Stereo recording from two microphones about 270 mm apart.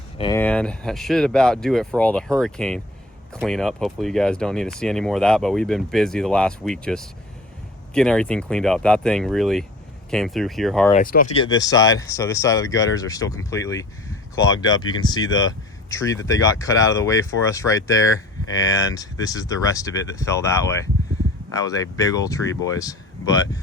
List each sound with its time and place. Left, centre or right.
0.2 s speech: centre
10.9 s speech: left
11.3 s speech: centre
14.5 s speech: left
14.8 s speech: centre